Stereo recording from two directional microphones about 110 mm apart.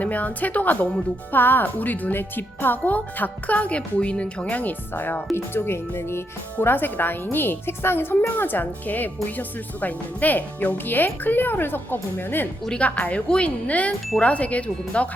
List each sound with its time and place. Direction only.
0.0 s a woman's voice: 15° left (ahead or behind)